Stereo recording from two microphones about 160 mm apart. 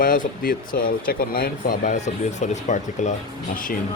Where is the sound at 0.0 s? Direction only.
60° left (ahead or behind).